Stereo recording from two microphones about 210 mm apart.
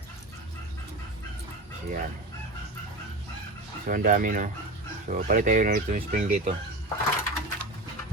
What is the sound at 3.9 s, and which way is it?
Speech, 40° right (ahead or behind).